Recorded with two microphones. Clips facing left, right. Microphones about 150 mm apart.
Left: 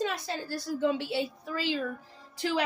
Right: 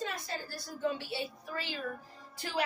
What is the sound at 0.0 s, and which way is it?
A woman's voice, 80° left.